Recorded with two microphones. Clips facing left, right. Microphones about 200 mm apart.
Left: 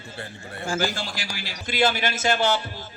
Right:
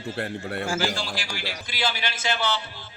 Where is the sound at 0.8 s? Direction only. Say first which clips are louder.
Even; 45° left (ahead or behind).